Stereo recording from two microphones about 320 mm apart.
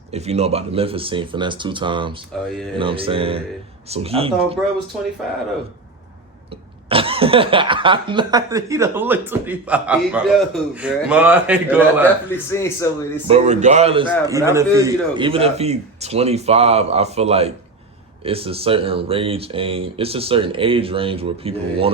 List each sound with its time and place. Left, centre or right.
0.1 s speech: centre
6.8 s speech: centre
12.3 s speech: centre
13.2 s a man's voice: centre